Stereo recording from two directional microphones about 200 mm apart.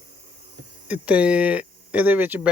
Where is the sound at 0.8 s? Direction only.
5° right (ahead or behind).